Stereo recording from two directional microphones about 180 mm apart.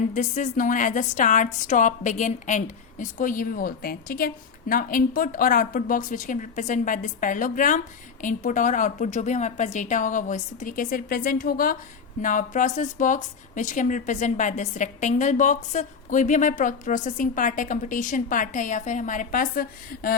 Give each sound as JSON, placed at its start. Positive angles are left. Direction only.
{"t": 0.1, "sound": "speech", "side_deg": 45}